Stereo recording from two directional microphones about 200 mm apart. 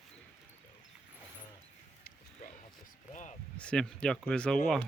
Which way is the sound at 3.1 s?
40° left (ahead or behind).